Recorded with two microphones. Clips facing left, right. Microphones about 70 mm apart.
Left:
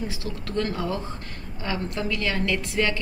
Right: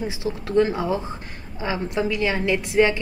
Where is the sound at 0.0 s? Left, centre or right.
Centre.